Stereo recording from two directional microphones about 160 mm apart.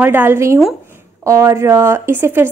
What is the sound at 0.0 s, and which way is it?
A woman's voice, 10° right (ahead or behind).